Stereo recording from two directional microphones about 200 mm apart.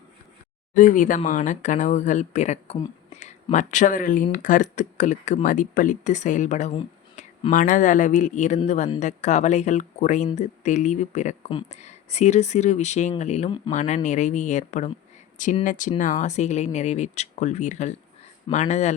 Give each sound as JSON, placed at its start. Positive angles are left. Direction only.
{"t": 0.8, "sound": "speech", "side_deg": 40}